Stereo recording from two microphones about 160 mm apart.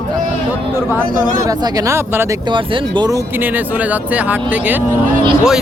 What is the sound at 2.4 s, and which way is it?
Speech, 30° right (ahead or behind).